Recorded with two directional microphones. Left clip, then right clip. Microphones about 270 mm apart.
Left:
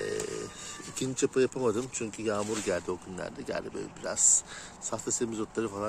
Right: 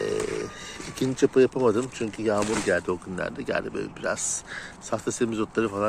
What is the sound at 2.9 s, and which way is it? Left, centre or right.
Speech, centre.